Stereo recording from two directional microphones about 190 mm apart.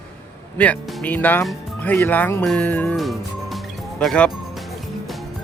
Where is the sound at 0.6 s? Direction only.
10° left (ahead or behind).